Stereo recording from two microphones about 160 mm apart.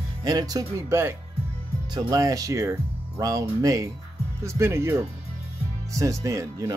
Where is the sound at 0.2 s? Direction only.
25° right (ahead or behind).